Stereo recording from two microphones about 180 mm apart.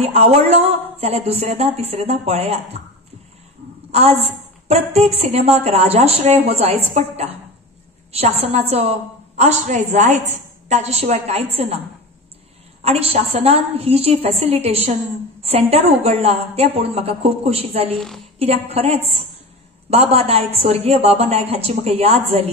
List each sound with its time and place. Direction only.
0.0 s a woman's voice: 35° right (ahead or behind)
3.9 s a woman's voice: 35° right (ahead or behind)
12.8 s a woman's voice: 35° right (ahead or behind)
17.9 s a woman's voice: centre (ahead or behind)
18.4 s a woman's voice: 35° right (ahead or behind)